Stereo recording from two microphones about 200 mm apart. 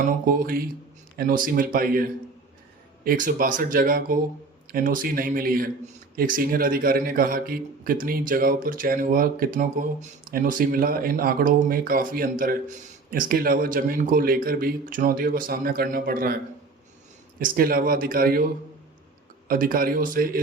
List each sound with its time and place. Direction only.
0.3 s a man's voice: 45° right (ahead or behind)
17.4 s a man's voice: 45° right (ahead or behind)